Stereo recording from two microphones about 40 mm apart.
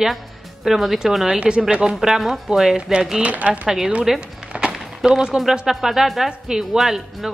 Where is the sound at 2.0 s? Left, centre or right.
Centre.